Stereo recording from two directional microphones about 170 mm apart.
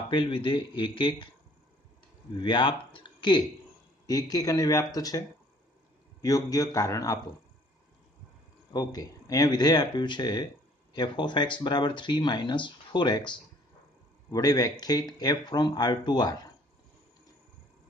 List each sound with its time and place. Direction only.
0.1 s speech: 30° left (ahead or behind)
2.3 s speech: 30° left (ahead or behind)
6.2 s speech: 20° left (ahead or behind)
8.7 s speech: 20° left (ahead or behind)
14.3 s speech: 20° left (ahead or behind)